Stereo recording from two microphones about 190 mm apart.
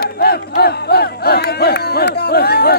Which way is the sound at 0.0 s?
55° left (ahead or behind).